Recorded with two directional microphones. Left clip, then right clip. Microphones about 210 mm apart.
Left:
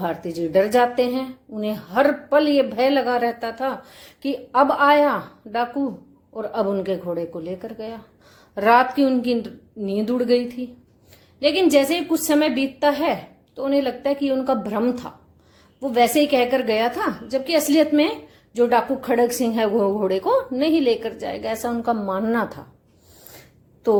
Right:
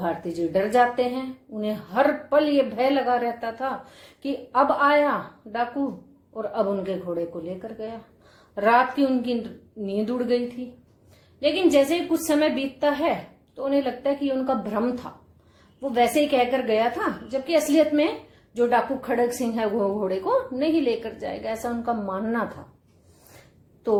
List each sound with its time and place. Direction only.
0.0 s a woman's voice: 35° left (ahead or behind)